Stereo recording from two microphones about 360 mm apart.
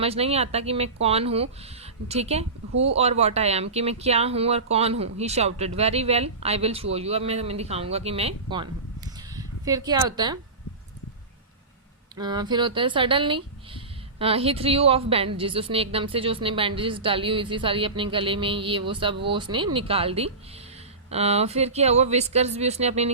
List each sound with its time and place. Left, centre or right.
0.0 s speech: centre
9.3 s a sound: centre
12.1 s speech: centre